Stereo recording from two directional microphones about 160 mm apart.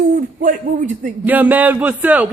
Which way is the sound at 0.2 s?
55° right (ahead or behind).